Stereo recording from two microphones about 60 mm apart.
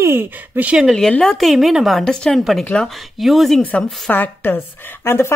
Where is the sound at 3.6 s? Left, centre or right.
Left.